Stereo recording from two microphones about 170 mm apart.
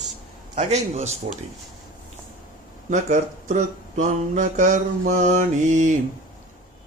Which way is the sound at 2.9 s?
45° right (ahead or behind).